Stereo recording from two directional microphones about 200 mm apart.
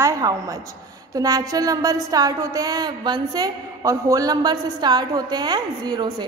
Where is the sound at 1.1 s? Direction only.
20° right (ahead or behind).